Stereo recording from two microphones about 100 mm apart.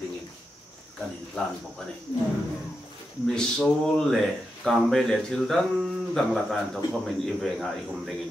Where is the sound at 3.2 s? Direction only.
5° left (ahead or behind).